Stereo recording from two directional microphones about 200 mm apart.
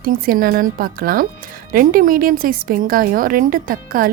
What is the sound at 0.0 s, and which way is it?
A woman's voice, 45° right (ahead or behind).